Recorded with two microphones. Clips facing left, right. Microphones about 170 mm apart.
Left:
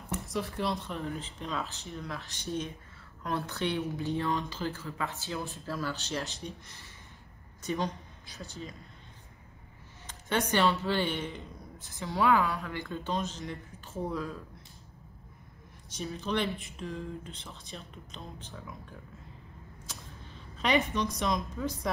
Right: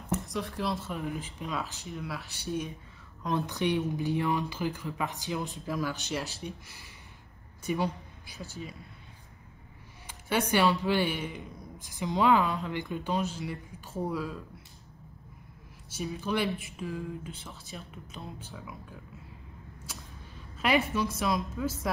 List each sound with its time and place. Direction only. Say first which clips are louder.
0.3 s a woman's voice: even; centre (ahead or behind)
10.0 s speech: right 1 dB; 10° right (ahead or behind)
15.9 s speech: right 1 dB; 10° right (ahead or behind)
20.5 s a woman's voice: right 1 dB; 5° right (ahead or behind)